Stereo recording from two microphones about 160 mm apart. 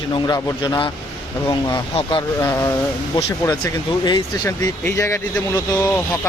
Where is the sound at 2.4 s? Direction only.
20° left (ahead or behind).